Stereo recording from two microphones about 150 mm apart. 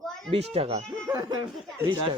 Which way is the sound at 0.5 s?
40° right (ahead or behind).